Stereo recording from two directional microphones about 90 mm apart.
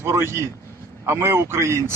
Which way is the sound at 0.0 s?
30° right (ahead or behind).